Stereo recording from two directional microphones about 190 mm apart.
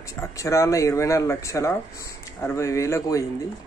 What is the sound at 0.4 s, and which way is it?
Speech, 15° left (ahead or behind).